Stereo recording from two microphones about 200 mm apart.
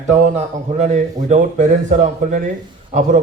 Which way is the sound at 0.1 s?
35° right (ahead or behind).